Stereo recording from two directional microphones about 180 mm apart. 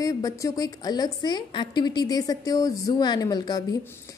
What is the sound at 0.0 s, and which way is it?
A woman's voice, 20° left (ahead or behind).